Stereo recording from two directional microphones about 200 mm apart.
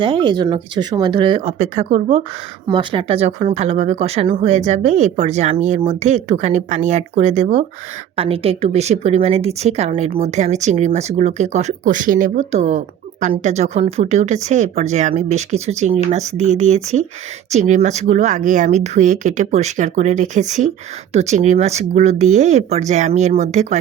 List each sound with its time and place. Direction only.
0.0 s speech: 25° right (ahead or behind)